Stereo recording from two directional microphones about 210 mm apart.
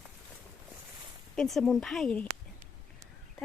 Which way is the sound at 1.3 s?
Centre (ahead or behind).